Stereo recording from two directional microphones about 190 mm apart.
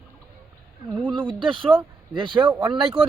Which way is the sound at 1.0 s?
25° right (ahead or behind).